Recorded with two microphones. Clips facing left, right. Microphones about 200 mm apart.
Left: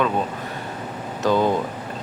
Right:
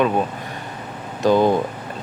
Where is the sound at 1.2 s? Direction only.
15° right (ahead or behind).